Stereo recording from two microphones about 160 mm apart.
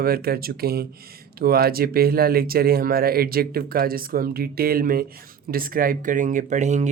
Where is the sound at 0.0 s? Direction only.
70° right (ahead or behind).